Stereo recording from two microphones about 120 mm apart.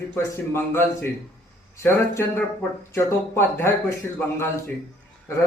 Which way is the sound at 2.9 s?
20° left (ahead or behind).